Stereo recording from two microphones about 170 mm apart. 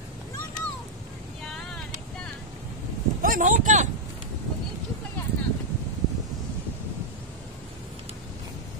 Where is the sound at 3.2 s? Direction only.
50° right (ahead or behind).